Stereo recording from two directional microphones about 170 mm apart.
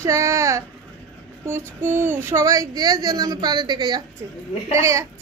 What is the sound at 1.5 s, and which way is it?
Speech, 15° right (ahead or behind).